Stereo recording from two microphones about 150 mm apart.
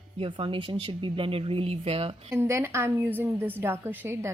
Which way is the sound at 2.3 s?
20° right (ahead or behind).